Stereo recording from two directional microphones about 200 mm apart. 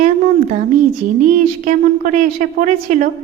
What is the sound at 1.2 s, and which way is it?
Speech, 40° right (ahead or behind).